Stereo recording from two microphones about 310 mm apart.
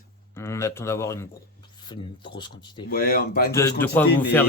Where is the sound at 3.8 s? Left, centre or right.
Centre.